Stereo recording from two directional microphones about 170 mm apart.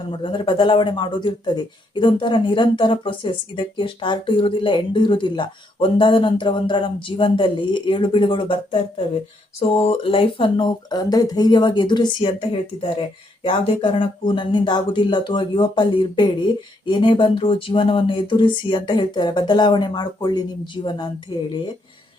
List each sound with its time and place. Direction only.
0.1 s speech: 30° left (ahead or behind)